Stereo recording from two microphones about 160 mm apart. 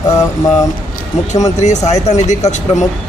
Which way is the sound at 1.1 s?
45° left (ahead or behind).